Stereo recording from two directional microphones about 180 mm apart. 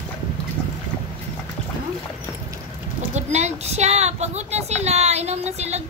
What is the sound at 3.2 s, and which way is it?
A woman's voice, 40° right (ahead or behind).